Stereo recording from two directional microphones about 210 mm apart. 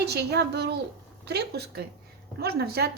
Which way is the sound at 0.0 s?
50° right (ahead or behind).